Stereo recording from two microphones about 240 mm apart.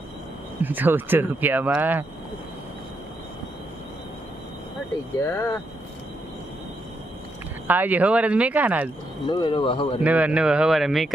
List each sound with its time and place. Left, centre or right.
0.6 s speech: centre
5.2 s speech: centre
7.7 s speech: centre
9.3 s speech: centre
10.0 s speech: centre